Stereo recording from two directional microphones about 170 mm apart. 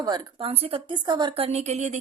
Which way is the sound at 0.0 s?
25° right (ahead or behind).